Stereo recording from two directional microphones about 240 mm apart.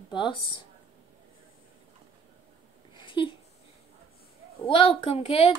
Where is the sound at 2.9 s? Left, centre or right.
Centre.